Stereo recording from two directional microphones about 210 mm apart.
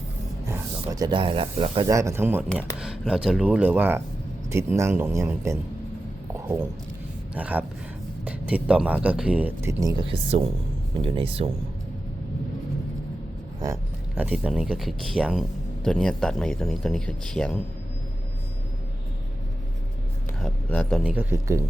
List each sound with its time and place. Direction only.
0.4 s speech: 15° right (ahead or behind)
1.9 s speech: 15° right (ahead or behind)
7.3 s speech: 5° right (ahead or behind); by 11.5 s 25° right (ahead or behind)
14.2 s speech: 5° right (ahead or behind)
20.4 s speech: 5° left (ahead or behind)
21.0 s speech: 10° right (ahead or behind)